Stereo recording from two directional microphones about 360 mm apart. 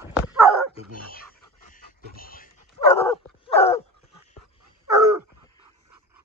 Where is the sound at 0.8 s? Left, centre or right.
Centre.